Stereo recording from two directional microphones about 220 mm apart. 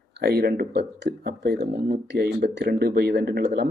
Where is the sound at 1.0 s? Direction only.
50° right (ahead or behind).